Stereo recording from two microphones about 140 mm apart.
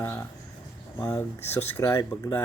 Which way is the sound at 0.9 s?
10° left (ahead or behind).